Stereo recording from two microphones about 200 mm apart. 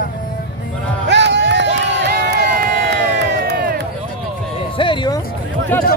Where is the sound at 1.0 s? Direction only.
60° right (ahead or behind).